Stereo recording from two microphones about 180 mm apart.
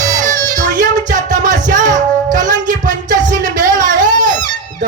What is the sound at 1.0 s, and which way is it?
Music, 45° right (ahead or behind).